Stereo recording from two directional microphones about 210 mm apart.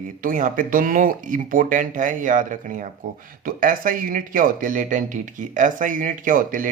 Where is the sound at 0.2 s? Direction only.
40° right (ahead or behind).